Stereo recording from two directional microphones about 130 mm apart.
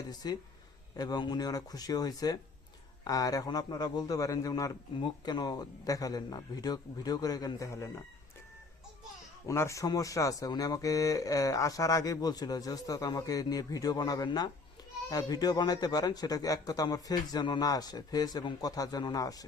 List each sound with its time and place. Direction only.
0.1 s a man's voice: 30° left (ahead or behind)
9.5 s a man's voice: 25° left (ahead or behind)